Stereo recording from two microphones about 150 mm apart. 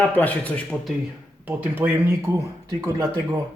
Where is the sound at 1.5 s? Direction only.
10° right (ahead or behind).